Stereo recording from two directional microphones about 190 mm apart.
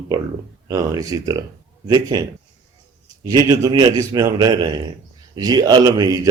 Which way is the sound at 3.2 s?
20° right (ahead or behind).